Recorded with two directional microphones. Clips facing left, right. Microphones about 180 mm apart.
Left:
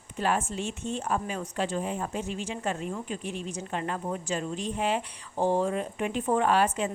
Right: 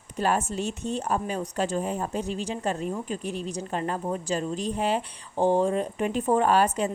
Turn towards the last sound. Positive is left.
turn(degrees=-40)  # may be behind; listen again after turning